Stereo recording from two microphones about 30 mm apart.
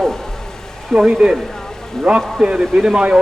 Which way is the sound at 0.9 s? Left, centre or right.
Right.